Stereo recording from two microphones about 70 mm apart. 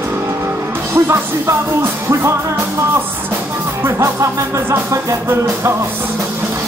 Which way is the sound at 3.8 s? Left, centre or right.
Right.